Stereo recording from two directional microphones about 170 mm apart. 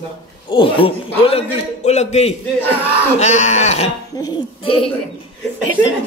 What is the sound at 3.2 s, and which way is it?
Laughter, 45° left (ahead or behind).